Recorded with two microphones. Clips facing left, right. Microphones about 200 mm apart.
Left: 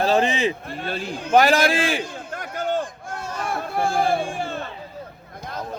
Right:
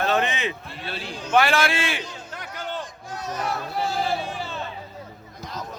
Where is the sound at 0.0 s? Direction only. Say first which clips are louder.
Left 4 dB; 30° left (ahead or behind).